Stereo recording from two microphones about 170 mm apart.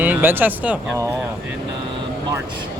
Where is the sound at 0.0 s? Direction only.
10° right (ahead or behind).